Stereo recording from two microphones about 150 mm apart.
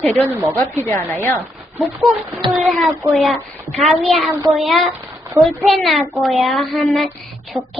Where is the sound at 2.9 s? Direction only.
15° right (ahead or behind).